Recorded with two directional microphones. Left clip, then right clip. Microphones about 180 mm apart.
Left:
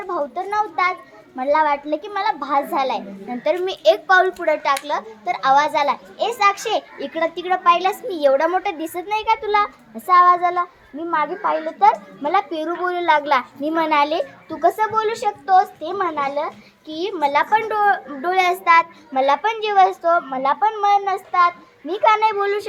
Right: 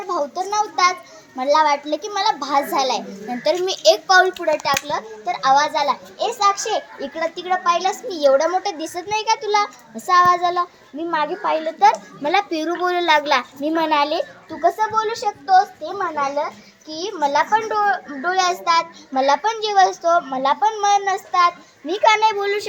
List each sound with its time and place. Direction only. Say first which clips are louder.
0.1 s a child's voice: right 1 dB; 5° right (ahead or behind)
1.4 s child singing: right 1 dB; 5° right (ahead or behind)
3.4 s a child's voice: right 1 dB; 10° right (ahead or behind)
4.0 s child singing: right 1 dB; 10° right (ahead or behind); by 16.3 s 15° left (ahead or behind)
16.9 s a child's voice: left 1 dB; 20° left (ahead or behind)
18.6 s child singing: left 4 dB; 10° left (ahead or behind); by 22.6 s 15° right (ahead or behind)